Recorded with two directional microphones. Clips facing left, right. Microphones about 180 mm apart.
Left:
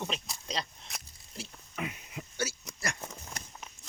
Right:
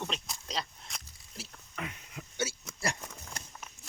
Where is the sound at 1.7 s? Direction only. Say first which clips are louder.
Left 3 dB; 10° left (ahead or behind).